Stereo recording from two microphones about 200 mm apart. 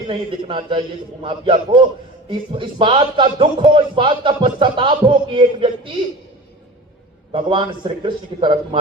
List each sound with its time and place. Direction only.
0.1 s a man's voice: 25° right (ahead or behind)
7.3 s a man's voice: 25° right (ahead or behind)